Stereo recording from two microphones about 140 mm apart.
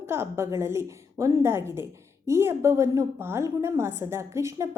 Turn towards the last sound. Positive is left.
turn(degrees=-20)  # may be behind; listen again after turning